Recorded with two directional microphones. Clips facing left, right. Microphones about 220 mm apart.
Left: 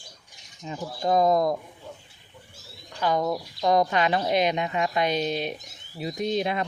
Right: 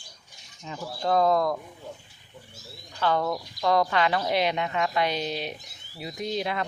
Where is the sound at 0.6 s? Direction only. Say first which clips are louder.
Left 2 dB; 20° left (ahead or behind).